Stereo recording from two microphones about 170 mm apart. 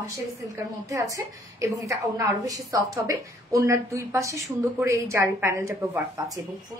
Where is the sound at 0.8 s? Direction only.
20° right (ahead or behind).